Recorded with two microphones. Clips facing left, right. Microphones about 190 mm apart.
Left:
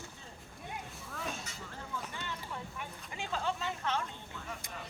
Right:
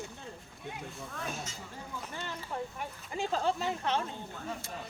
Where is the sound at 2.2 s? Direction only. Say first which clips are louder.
Right 4 dB; 40° right (ahead or behind).